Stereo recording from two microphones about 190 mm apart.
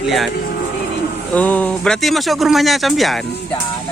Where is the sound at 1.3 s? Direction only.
5° left (ahead or behind).